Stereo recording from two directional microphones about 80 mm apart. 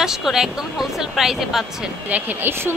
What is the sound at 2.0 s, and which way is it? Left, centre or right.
Speech, centre.